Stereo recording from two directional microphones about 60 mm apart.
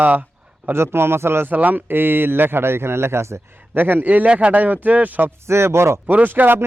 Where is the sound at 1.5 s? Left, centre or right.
Right.